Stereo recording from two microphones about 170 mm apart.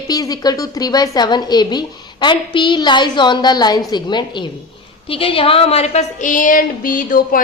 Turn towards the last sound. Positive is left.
turn(degrees=55)  # may be behind; listen again after turning